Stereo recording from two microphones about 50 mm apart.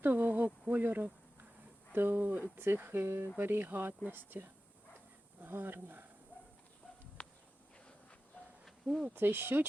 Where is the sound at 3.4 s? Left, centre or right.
Right.